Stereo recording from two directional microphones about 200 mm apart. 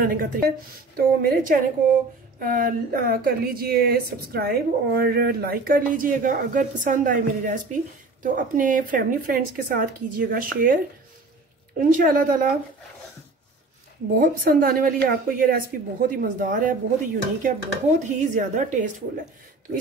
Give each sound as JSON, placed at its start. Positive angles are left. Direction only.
{"t": 0.0, "sound": "speech", "side_deg": -45}
{"t": 11.8, "sound": "speech", "side_deg": -40}
{"t": 14.2, "sound": "speech", "side_deg": -45}